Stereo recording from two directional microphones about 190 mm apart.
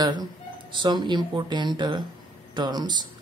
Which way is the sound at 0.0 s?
20° right (ahead or behind).